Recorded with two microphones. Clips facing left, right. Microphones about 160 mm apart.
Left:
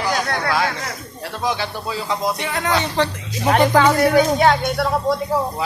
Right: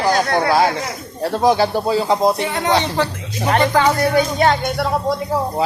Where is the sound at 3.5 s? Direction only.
5° left (ahead or behind).